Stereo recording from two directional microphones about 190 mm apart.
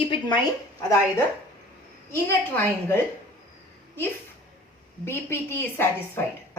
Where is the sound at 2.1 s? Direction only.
10° left (ahead or behind).